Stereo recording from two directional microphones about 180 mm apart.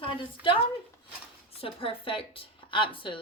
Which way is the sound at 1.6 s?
30° left (ahead or behind).